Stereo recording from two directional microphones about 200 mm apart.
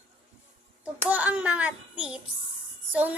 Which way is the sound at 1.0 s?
10° right (ahead or behind).